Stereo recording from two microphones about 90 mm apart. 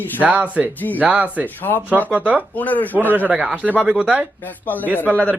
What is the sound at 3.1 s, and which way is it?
Speech, 20° right (ahead or behind).